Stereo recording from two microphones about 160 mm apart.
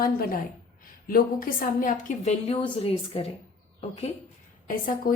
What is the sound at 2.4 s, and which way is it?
Speech, 40° left (ahead or behind).